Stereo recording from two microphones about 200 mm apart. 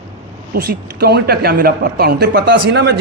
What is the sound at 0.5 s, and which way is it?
A man's voice, 50° right (ahead or behind).